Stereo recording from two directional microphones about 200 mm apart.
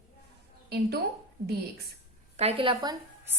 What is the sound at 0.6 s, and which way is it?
Speech, 55° right (ahead or behind).